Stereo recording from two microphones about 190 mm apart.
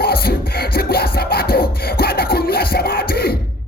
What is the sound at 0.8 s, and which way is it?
Beatboxing, 55° left (ahead or behind).